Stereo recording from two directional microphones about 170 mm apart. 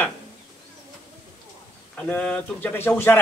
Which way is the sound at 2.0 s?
5° left (ahead or behind).